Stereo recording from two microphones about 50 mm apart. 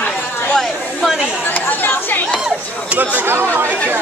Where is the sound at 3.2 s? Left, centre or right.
Right.